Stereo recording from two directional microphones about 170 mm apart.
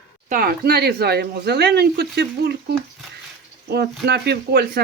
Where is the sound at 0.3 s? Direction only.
60° right (ahead or behind).